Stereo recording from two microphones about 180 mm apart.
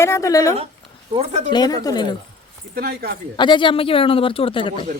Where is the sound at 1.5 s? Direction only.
20° left (ahead or behind).